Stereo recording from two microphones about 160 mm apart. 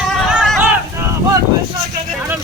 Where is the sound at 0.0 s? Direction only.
5° right (ahead or behind).